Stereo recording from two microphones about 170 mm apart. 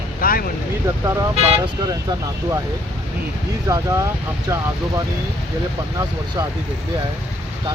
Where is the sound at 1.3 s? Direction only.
35° right (ahead or behind).